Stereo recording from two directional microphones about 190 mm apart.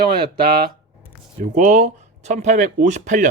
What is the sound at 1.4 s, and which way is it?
Speech, 40° right (ahead or behind).